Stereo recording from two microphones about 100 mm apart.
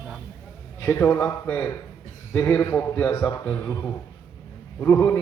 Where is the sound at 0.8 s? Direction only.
20° left (ahead or behind).